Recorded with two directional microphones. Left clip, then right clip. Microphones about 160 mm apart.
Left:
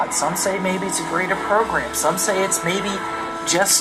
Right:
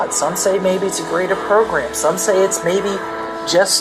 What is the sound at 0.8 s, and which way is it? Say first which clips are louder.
A woman's voice: right 4 dB; 35° right (ahead or behind).